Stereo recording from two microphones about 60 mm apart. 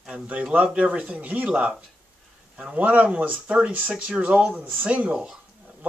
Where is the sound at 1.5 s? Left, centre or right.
Centre.